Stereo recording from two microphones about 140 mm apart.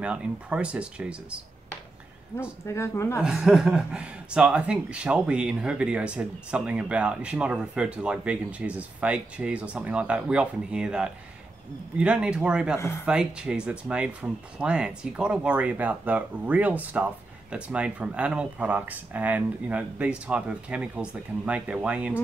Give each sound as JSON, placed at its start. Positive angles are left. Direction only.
{"t": 0.0, "sound": "speech", "side_deg": -10}
{"t": 2.6, "sound": "speech", "side_deg": 20}
{"t": 3.2, "sound": "speech", "side_deg": -5}
{"t": 12.7, "sound": "speech", "side_deg": 20}
{"t": 13.0, "sound": "speech", "side_deg": -5}